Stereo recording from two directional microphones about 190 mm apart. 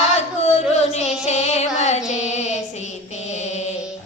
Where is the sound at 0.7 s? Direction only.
35° left (ahead or behind).